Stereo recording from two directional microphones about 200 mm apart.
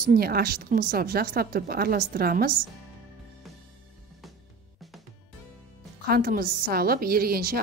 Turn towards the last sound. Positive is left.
turn(degrees=-50)  # may be behind; listen again after turning